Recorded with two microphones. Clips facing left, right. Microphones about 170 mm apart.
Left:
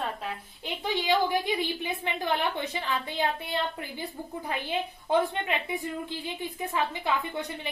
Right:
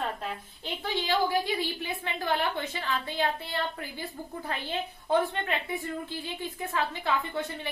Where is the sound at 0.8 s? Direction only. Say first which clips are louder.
Left 2 dB; 15° left (ahead or behind).